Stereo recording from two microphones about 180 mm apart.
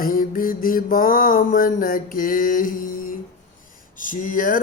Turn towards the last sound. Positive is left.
turn(degrees=50)  # may be behind; listen again after turning